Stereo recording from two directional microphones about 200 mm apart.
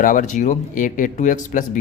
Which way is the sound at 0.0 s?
40° left (ahead or behind).